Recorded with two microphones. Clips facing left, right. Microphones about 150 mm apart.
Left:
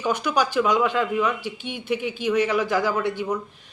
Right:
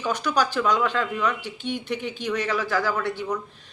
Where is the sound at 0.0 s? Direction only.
10° left (ahead or behind).